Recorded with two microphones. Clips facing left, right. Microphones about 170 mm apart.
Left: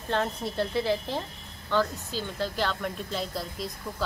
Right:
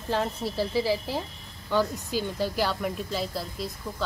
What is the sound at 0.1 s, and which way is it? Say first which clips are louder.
A woman's voice: right 1 dB; 5° right (ahead or behind).